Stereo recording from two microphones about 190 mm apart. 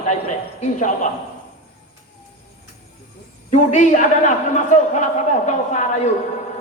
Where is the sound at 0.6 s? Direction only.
40° left (ahead or behind).